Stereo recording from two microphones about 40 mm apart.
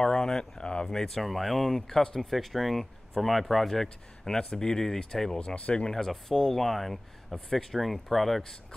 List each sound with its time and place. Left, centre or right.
0.0 s a sound: centre
0.8 s speech: centre
5.4 s speech: left
5.9 s speech: centre